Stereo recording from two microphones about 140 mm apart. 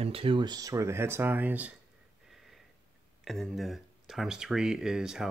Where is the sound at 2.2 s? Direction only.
Centre (ahead or behind).